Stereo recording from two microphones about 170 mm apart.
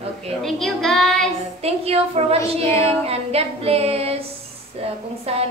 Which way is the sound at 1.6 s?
35° right (ahead or behind).